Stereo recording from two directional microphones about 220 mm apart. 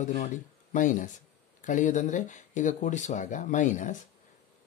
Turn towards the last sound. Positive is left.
turn(degrees=35)  # may be behind; listen again after turning